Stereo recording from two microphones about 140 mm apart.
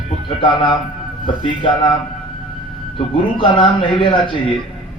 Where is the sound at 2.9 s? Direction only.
35° left (ahead or behind).